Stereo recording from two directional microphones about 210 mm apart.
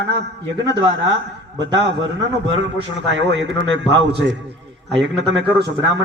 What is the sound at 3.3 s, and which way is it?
A man's voice, 60° right (ahead or behind).